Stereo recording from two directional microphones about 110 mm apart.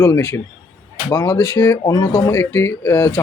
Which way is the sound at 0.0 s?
25° left (ahead or behind).